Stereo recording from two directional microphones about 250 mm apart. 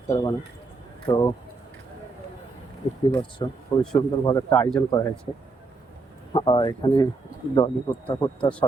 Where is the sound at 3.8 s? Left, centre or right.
Centre.